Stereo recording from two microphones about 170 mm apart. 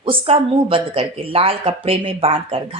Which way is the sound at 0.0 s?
30° right (ahead or behind).